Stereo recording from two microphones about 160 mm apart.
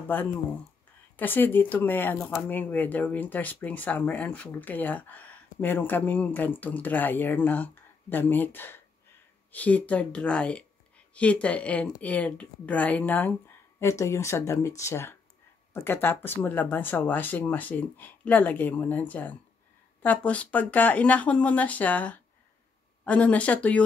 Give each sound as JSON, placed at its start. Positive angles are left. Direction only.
{"t": 1.1, "sound": "speech", "side_deg": 10}